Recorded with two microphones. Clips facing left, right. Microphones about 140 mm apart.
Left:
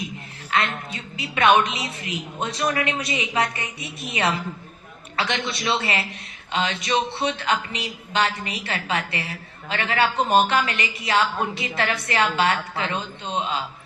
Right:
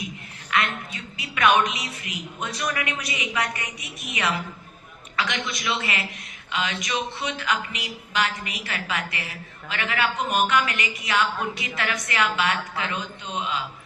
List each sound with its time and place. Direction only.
0.5 s a woman's voice: 30° left (ahead or behind)